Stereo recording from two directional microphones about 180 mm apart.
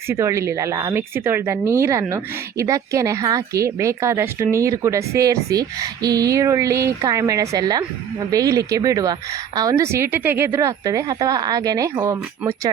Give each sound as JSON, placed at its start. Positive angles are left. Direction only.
{"t": 0.1, "sound": "a woman's voice", "side_deg": -15}